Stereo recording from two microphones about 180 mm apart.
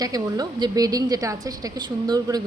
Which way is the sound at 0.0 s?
20° right (ahead or behind).